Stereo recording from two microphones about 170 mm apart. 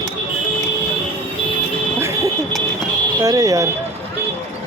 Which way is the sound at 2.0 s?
15° right (ahead or behind).